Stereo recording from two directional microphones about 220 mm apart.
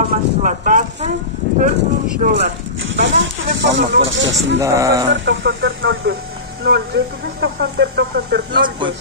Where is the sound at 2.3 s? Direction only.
55° right (ahead or behind).